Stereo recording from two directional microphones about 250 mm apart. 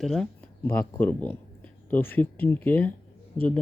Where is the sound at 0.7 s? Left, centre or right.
Centre.